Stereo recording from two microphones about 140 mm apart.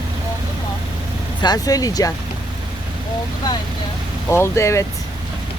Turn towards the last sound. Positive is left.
turn(degrees=20)  # may be behind; listen again after turning